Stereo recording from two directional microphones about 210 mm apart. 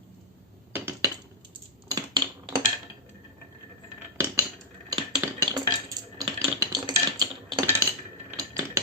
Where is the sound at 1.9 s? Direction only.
20° right (ahead or behind).